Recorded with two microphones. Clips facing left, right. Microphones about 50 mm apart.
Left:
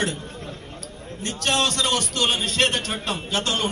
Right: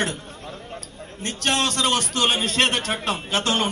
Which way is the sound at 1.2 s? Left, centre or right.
Right.